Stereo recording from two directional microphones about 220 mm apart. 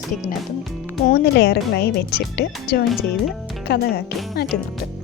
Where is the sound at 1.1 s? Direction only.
50° left (ahead or behind).